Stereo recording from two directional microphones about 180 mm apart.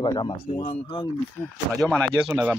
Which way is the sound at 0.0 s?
25° left (ahead or behind).